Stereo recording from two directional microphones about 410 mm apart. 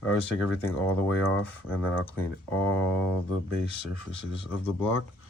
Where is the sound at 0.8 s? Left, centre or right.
Centre.